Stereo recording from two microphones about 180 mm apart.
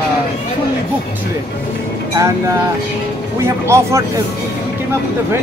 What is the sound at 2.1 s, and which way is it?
Speech, 20° right (ahead or behind).